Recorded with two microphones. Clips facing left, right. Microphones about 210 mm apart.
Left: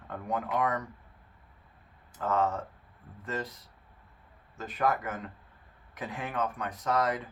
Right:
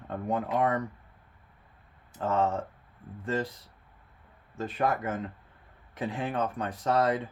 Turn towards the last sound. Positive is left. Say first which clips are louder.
# right 3 dB
turn(degrees=-30)  # may be behind; listen again after turning